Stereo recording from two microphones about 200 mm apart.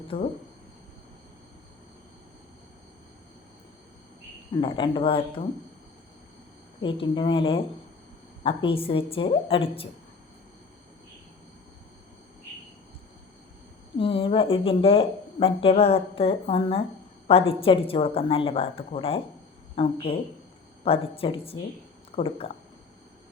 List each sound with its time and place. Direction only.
0.1 s speech: 25° left (ahead or behind)
4.6 s speech: 25° left (ahead or behind)
6.8 s speech: 25° left (ahead or behind)
14.0 s speech: 25° left (ahead or behind)